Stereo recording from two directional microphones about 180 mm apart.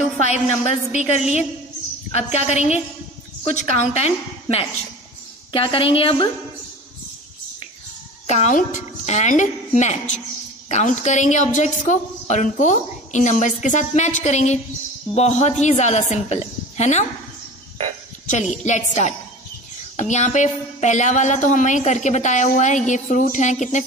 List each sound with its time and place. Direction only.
0.2 s a woman's voice: 40° left (ahead or behind)
8.3 s a woman's voice: 40° left (ahead or behind)
18.5 s a woman's voice: 40° left (ahead or behind)